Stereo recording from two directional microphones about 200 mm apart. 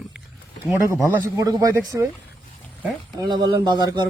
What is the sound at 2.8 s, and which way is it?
Speech, 20° right (ahead or behind).